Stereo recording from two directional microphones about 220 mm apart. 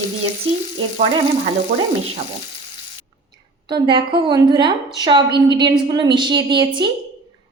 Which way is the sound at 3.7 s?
20° right (ahead or behind).